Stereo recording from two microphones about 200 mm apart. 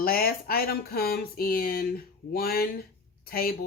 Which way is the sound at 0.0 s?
50° left (ahead or behind).